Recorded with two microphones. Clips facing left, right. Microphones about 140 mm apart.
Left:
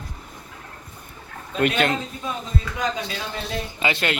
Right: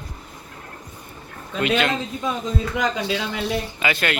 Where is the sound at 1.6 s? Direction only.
45° left (ahead or behind).